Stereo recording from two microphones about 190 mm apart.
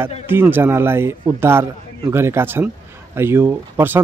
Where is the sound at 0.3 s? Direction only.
10° right (ahead or behind).